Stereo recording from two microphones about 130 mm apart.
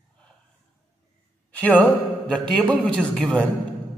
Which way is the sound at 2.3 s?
5° left (ahead or behind).